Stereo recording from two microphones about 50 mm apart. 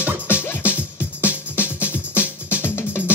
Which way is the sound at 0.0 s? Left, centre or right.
Right.